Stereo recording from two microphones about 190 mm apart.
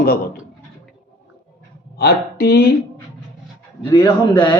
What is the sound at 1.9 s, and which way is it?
Speech, 55° left (ahead or behind).